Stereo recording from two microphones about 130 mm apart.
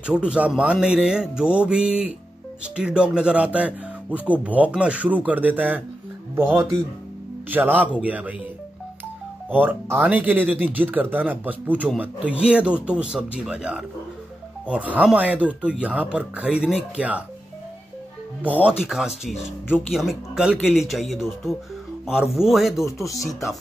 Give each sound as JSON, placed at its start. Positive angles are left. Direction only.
{"t": 0.0, "sound": "speech", "side_deg": -10}
{"t": 9.5, "sound": "speech", "side_deg": -15}
{"t": 18.4, "sound": "speech", "side_deg": -10}